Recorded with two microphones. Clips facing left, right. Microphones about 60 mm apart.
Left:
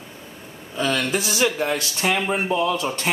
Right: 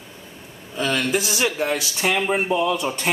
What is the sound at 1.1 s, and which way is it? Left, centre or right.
Speech, centre.